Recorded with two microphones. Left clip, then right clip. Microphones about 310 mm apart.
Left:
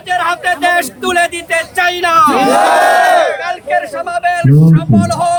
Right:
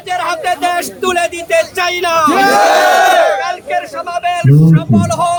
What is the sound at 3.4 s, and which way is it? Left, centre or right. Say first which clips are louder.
Speech: left 1 dB; centre.